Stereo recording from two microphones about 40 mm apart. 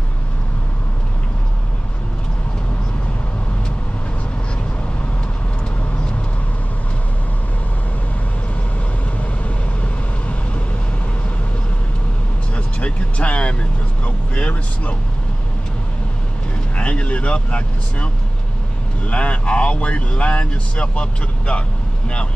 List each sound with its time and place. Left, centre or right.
12.5 s vehicle: left
16.7 s vehicle: left
19.0 s speech: left